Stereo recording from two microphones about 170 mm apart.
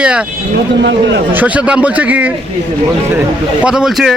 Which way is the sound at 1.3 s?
10° right (ahead or behind).